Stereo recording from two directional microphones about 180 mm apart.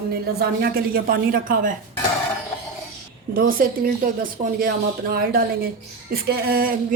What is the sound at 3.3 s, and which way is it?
A woman's voice, 50° right (ahead or behind).